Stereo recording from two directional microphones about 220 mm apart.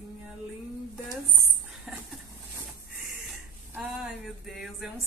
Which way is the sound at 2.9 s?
Centre (ahead or behind).